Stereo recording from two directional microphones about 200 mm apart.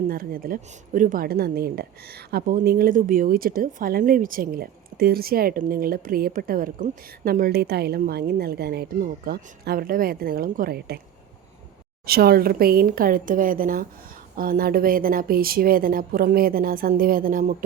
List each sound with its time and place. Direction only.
0.1 s a woman's voice: 45° right (ahead or behind)
12.0 s a woman's voice: 50° right (ahead or behind)